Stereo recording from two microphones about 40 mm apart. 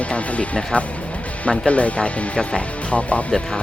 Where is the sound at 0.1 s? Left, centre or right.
Left.